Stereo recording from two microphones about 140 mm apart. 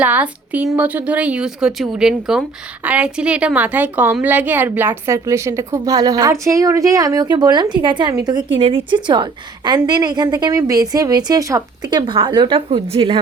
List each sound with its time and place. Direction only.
0.0 s a woman's voice: 10° right (ahead or behind); by 12.8 s 35° right (ahead or behind)